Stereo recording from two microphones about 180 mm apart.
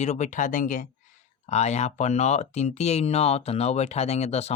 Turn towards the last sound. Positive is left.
turn(degrees=35)  # may be behind; listen again after turning